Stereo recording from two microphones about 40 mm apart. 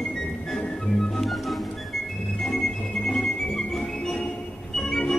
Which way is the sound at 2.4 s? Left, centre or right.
Centre.